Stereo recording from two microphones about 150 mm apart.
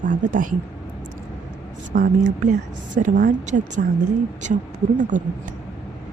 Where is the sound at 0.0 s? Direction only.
60° right (ahead or behind).